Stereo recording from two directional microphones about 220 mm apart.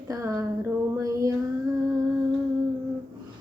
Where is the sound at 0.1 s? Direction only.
15° right (ahead or behind).